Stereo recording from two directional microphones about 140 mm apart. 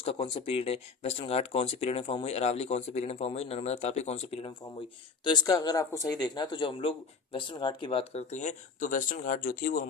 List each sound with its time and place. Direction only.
0.0 s speech: 45° left (ahead or behind)
5.2 s speech: 30° left (ahead or behind); by 9.8 s 85° left